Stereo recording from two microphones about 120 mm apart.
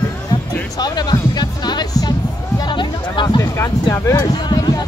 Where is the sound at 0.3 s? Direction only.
35° left (ahead or behind).